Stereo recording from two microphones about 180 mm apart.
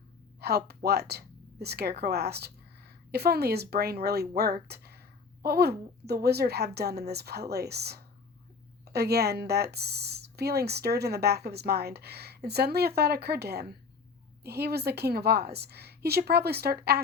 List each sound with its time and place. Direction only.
0.3 s a woman's voice: 65° right (ahead or behind)